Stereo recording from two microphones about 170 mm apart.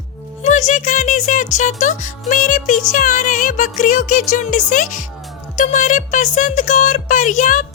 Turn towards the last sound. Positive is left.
turn(degrees=50)  # may be behind; listen again after turning